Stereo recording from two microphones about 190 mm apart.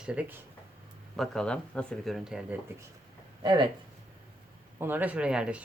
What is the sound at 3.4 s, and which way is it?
Speech, 25° right (ahead or behind).